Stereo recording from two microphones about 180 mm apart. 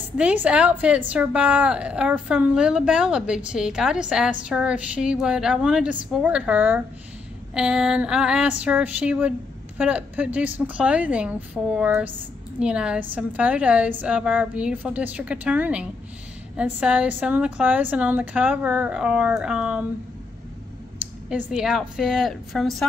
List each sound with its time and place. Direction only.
0.2 s a woman's voice: 5° right (ahead or behind)
21.3 s a woman's voice: 5° right (ahead or behind)